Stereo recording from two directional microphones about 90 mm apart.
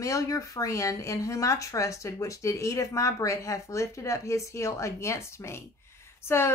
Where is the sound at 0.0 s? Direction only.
35° left (ahead or behind).